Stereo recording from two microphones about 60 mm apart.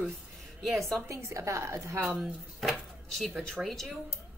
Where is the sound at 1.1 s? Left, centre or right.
Right.